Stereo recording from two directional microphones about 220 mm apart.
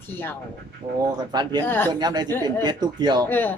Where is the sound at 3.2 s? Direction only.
10° left (ahead or behind).